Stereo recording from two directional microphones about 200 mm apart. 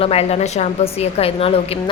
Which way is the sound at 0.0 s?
30° left (ahead or behind).